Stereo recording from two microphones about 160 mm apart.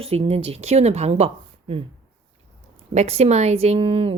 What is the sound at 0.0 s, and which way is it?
Speech, 40° right (ahead or behind).